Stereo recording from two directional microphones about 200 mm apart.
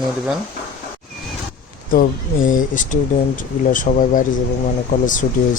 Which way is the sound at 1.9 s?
45° left (ahead or behind).